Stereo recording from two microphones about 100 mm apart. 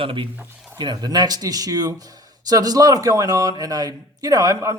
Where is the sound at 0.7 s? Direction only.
45° right (ahead or behind).